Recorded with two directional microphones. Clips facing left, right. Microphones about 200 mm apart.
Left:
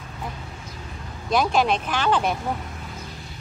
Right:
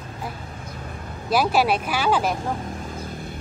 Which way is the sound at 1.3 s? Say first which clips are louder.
Right 1 dB; 5° right (ahead or behind).